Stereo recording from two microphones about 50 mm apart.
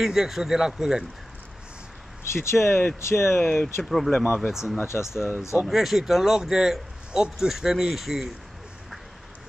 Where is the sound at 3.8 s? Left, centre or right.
Centre.